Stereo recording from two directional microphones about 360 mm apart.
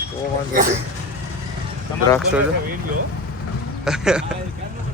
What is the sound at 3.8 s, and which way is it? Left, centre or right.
Speech, centre.